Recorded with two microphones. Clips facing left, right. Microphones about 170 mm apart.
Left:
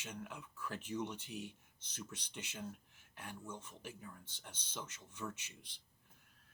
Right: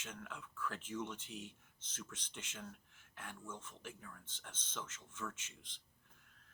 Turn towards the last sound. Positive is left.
turn(degrees=10)  # may be behind; listen again after turning